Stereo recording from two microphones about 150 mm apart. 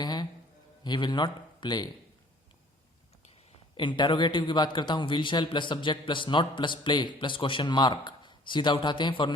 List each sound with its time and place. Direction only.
0.0 s music: 30° left (ahead or behind)
0.9 s speech: 30° left (ahead or behind)
3.8 s a man's voice: 30° left (ahead or behind)